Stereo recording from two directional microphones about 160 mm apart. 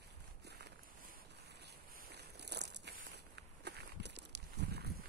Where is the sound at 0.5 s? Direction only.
90° right.